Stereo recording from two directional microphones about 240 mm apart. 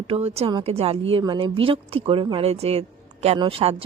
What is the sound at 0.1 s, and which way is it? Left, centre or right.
A woman's voice, right.